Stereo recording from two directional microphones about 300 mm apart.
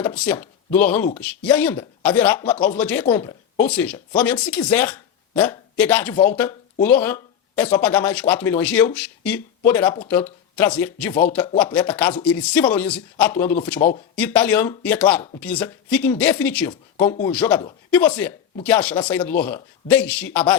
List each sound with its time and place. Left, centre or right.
0.0 s speech: centre